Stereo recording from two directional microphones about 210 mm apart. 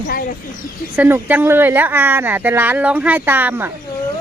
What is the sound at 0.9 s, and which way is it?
Speech, 10° right (ahead or behind).